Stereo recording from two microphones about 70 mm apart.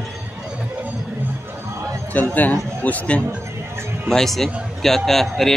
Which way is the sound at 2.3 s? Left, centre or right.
Left.